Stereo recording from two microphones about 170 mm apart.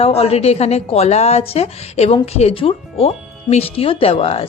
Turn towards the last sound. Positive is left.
turn(degrees=35)  # may be behind; listen again after turning